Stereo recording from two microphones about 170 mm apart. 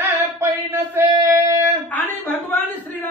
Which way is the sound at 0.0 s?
15° right (ahead or behind).